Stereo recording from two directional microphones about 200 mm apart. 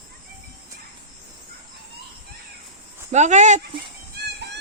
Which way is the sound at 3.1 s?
35° right (ahead or behind).